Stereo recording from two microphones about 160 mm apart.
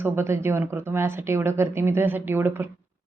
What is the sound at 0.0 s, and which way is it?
Speech, 15° right (ahead or behind).